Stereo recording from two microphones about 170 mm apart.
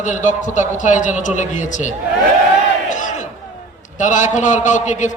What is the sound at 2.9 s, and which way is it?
Crowd, 45° left (ahead or behind).